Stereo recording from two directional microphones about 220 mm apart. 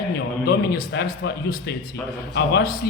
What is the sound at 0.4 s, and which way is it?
A man's voice, 45° left (ahead or behind).